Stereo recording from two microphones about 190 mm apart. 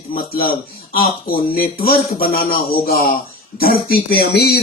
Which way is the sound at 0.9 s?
50° left (ahead or behind).